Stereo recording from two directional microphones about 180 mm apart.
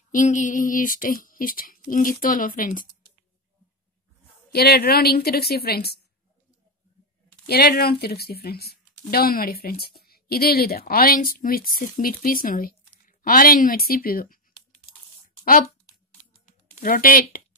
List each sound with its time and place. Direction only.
0.1 s speech: 45° left (ahead or behind)
4.5 s speech: 60° left (ahead or behind)
7.4 s speech: 60° left (ahead or behind)
16.4 s a sound: 50° left (ahead or behind)